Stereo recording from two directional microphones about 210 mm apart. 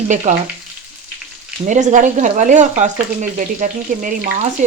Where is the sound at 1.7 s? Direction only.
35° right (ahead or behind).